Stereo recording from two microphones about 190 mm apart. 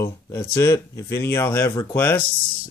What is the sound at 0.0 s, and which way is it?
Speech, 10° left (ahead or behind).